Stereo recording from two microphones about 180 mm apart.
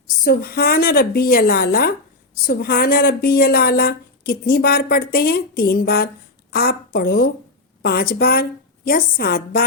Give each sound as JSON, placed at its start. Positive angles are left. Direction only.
{"t": 0.3, "sound": "a woman's voice", "side_deg": 55}